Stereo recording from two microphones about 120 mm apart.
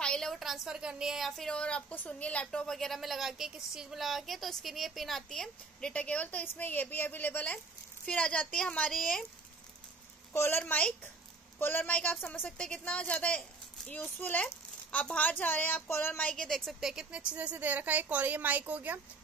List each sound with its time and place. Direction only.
0.0 s a woman's voice: 5° left (ahead or behind)
10.3 s a woman's voice: 20° left (ahead or behind)
10.6 s a woman's voice: 10° left (ahead or behind); by 18.9 s 15° right (ahead or behind)